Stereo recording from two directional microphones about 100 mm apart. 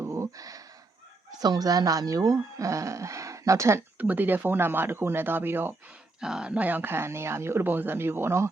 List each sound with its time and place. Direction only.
0.0 s a sound: 30° right (ahead or behind)
1.3 s speech: 40° right (ahead or behind)
3.9 s speech: 15° right (ahead or behind)
6.1 s speech: 5° right (ahead or behind); by 8.4 s 25° right (ahead or behind)